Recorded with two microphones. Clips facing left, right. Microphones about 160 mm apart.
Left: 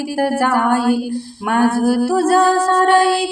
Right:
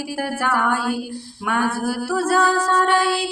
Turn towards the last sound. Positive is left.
turn(degrees=45)  # may be behind; listen again after turning